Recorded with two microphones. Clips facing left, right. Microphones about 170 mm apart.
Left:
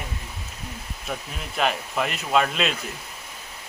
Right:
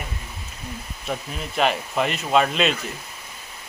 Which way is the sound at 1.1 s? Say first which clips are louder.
Right 4 dB; centre (ahead or behind).